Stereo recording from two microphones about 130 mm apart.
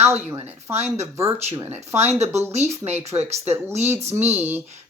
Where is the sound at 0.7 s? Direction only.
55° right (ahead or behind).